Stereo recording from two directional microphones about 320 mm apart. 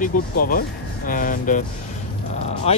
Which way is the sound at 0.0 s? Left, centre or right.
Left.